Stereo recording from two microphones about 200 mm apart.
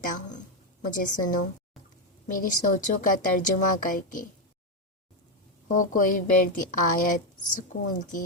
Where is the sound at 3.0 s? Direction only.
40° left (ahead or behind).